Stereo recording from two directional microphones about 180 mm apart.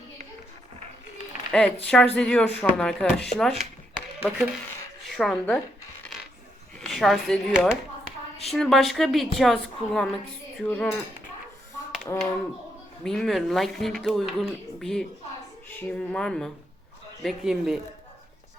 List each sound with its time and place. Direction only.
1.5 s speech: 5° left (ahead or behind)
5.0 s a woman's voice: centre (ahead or behind)
6.7 s speech: centre (ahead or behind)
10.6 s cutlery: 5° left (ahead or behind)
12.1 s cutlery: 20° left (ahead or behind)
13.1 s speech: centre (ahead or behind)